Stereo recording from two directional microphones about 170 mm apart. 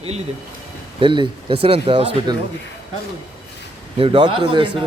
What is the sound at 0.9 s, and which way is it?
Speech, 30° right (ahead or behind).